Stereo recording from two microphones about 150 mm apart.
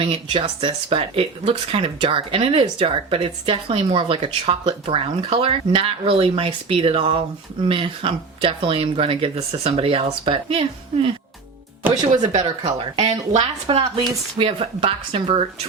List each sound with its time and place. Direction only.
0.0 s speech: 35° right (ahead or behind)
12.2 s speech: 30° right (ahead or behind)
13.0 s speech: 45° right (ahead or behind)